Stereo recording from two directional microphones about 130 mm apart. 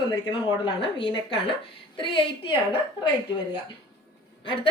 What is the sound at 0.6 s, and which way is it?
A woman's voice, 40° left (ahead or behind).